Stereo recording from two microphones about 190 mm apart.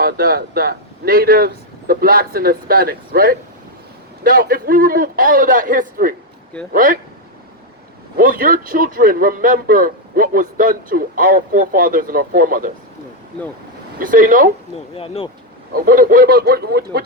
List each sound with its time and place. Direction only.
0.0 s a man's voice: 50° right (ahead or behind)
8.1 s a man's voice: 50° right (ahead or behind)
14.0 s a man's voice: 45° right (ahead or behind)
14.9 s speech: 30° left (ahead or behind)
15.7 s a man's voice: 50° right (ahead or behind)